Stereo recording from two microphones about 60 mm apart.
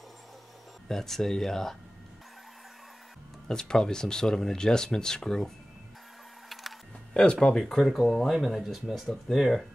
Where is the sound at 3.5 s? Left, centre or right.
Centre.